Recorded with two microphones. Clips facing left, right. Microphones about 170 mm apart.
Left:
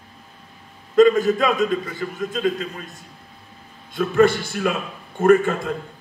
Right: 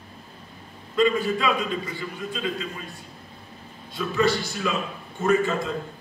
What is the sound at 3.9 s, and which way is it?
A man's voice, 50° left (ahead or behind).